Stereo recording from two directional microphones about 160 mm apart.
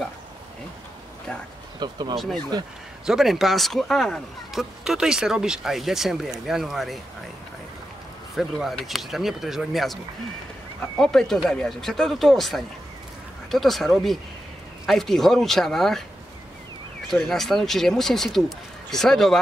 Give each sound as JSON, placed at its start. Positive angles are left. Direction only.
{"t": 1.8, "sound": "speech", "side_deg": -25}
{"t": 2.1, "sound": "speech", "side_deg": 0}
{"t": 8.4, "sound": "speech", "side_deg": 0}
{"t": 11.0, "sound": "speech", "side_deg": 5}
{"t": 17.1, "sound": "speech", "side_deg": 0}